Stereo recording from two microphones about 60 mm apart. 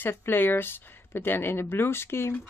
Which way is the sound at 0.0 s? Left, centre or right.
Left.